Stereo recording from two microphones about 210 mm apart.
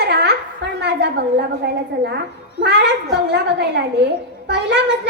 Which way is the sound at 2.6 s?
55° right (ahead or behind).